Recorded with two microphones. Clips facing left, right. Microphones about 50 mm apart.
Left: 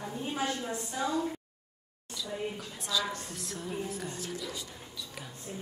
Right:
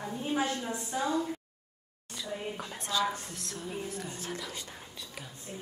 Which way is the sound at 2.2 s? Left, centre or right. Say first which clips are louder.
Left 1 dB; right.